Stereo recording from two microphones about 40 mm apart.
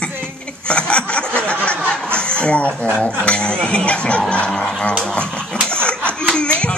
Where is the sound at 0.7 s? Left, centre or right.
Left.